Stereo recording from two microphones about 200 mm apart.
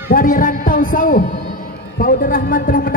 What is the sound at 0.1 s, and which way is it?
A man's voice, 45° left (ahead or behind).